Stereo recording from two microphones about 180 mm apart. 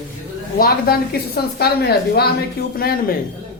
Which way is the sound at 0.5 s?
60° left (ahead or behind).